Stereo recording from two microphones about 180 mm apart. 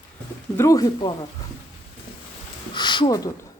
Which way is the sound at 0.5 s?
15° left (ahead or behind).